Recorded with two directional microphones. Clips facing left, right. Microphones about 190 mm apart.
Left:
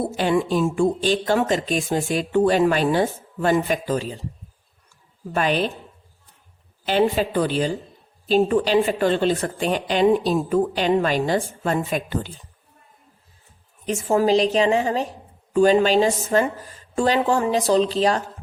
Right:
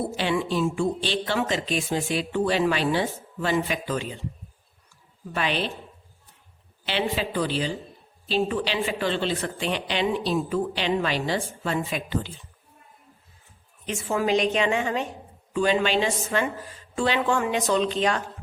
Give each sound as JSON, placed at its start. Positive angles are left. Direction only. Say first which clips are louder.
{"t": 0.2, "sound": "speech", "louder": "left 5 dB", "side_deg": 45}
{"t": 5.3, "sound": "speech", "louder": "left 5 dB", "side_deg": 45}
{"t": 6.8, "sound": "speech", "louder": "left 7 dB", "side_deg": 45}
{"t": 13.8, "sound": "a woman's voice", "louder": "left 6 dB", "side_deg": 40}